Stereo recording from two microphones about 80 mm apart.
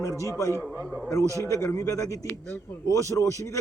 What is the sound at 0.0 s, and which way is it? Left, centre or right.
Speech, left.